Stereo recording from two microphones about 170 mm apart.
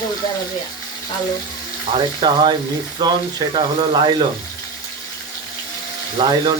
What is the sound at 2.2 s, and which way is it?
Speech, 25° right (ahead or behind).